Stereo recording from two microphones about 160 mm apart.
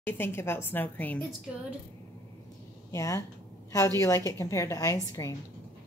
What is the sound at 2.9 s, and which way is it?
Speech, 20° left (ahead or behind).